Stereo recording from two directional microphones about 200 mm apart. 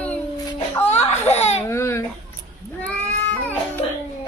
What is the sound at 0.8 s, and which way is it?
Speech, 30° left (ahead or behind).